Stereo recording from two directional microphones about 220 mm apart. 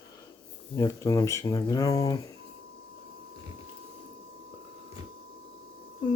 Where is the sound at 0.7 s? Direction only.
15° left (ahead or behind).